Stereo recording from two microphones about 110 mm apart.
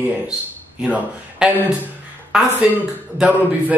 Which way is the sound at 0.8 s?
10° right (ahead or behind).